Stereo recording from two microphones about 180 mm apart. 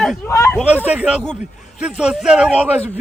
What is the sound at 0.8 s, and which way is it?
Speech, 5° right (ahead or behind).